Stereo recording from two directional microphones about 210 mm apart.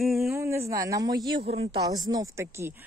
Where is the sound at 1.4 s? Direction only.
30° right (ahead or behind).